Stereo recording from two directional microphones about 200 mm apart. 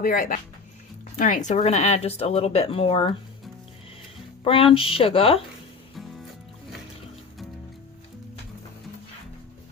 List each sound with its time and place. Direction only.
0.0 s speech: 45° left (ahead or behind); by 3.2 s 30° left (ahead or behind)
4.4 s speech: 25° left (ahead or behind)
5.9 s music: centre (ahead or behind)